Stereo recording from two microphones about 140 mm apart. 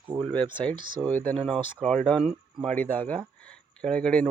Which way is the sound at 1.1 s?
10° left (ahead or behind).